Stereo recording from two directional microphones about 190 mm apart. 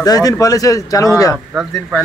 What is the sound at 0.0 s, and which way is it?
Speech, 20° left (ahead or behind).